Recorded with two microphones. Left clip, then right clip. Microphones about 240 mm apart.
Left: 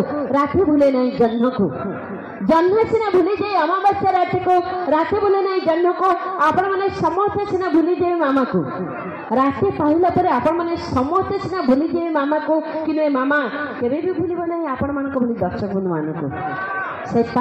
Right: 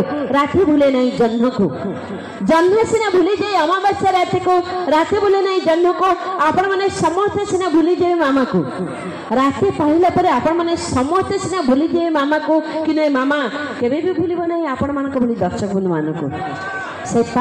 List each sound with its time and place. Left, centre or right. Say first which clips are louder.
0.4 s a woman's voice: right 2 dB; right
12.8 s a woman's voice: right 2 dB; right